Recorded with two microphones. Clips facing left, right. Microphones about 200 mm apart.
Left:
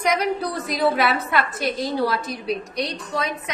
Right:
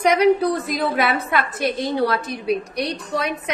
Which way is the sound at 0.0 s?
60° right (ahead or behind).